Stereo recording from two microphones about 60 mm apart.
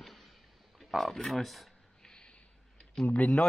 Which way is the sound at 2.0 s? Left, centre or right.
Centre.